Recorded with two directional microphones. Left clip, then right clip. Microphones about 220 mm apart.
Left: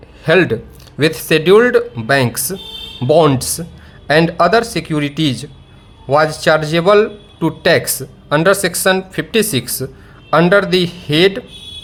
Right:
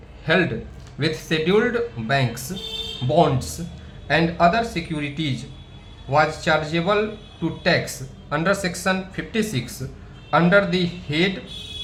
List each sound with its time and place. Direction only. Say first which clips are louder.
0.3 s speech: left 8 dB; 50° left (ahead or behind)